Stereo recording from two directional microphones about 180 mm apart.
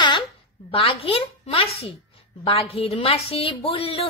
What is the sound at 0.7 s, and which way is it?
A woman's voice, 30° left (ahead or behind).